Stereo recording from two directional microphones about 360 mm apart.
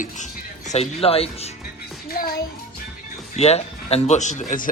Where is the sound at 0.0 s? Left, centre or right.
Centre.